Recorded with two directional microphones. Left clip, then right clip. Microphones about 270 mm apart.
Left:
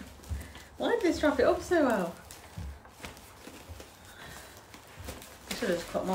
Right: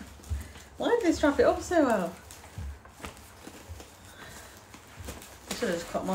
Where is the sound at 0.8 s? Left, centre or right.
Centre.